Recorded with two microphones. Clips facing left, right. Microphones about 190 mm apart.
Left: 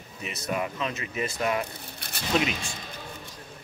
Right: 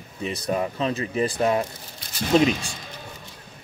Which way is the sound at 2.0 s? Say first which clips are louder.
Left 2 dB; 65° left (ahead or behind).